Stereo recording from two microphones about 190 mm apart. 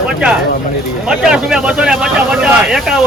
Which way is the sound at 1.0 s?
5° right (ahead or behind).